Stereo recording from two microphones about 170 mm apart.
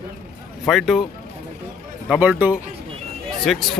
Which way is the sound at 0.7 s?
Centre (ahead or behind).